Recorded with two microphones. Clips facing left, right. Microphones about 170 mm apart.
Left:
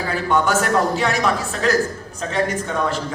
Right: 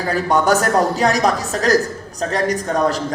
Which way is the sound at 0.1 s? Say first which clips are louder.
Right 4 dB; 40° right (ahead or behind).